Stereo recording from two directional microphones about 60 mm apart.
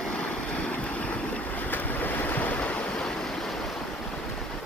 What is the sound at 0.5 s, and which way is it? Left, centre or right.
Waves, left.